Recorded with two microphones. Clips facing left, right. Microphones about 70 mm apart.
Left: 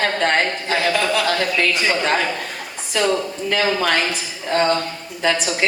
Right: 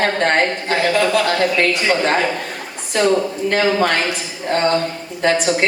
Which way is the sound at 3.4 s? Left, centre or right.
Right.